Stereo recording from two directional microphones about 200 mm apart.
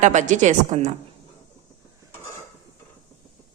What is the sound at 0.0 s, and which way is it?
Speech, 35° right (ahead or behind).